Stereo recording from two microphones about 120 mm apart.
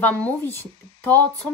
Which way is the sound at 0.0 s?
15° left (ahead or behind).